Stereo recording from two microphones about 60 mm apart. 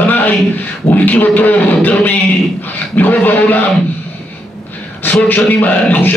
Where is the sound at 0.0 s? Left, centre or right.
Left.